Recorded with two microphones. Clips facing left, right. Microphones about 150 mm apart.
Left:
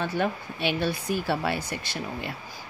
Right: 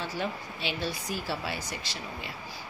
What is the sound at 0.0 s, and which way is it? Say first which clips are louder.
Speech: left 6 dB; 55° left (ahead or behind).